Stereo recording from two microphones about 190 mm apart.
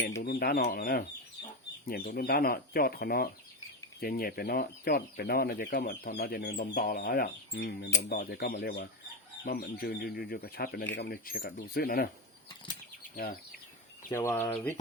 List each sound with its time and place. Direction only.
0.2 s speech: 50° left (ahead or behind)
13.1 s speech: 50° left (ahead or behind)
14.1 s speech: 10° left (ahead or behind)